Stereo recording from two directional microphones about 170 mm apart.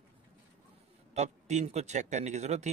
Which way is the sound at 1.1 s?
40° right (ahead or behind).